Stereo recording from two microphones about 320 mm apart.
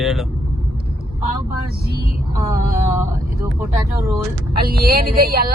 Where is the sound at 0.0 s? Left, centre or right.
Centre.